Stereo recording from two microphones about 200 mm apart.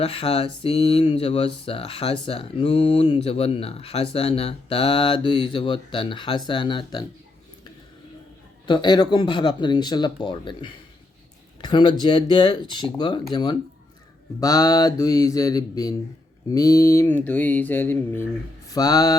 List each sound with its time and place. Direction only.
0.0 s speech: 30° left (ahead or behind)
8.6 s speech: 25° left (ahead or behind)
14.4 s mantra: 20° left (ahead or behind)
18.7 s speech: 20° left (ahead or behind)